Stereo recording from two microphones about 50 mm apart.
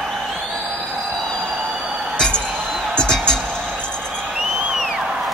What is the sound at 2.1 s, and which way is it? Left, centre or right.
Music, centre.